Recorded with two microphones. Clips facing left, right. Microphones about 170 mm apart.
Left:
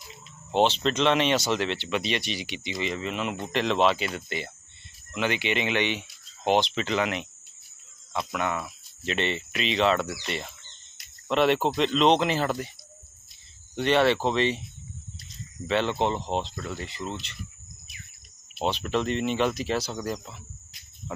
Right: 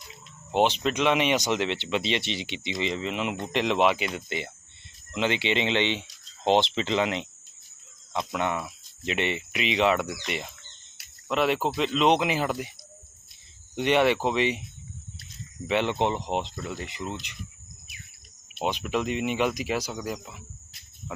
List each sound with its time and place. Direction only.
0.5 s speech: 10° right (ahead or behind)
8.3 s speech: 20° right (ahead or behind)
10.9 s speech: 5° right (ahead or behind)
13.7 s speech: 15° right (ahead or behind)
15.6 s speech: 15° right (ahead or behind)
18.6 s speech: 10° right (ahead or behind)